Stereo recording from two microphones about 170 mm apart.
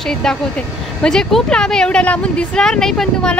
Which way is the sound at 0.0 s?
5° left (ahead or behind).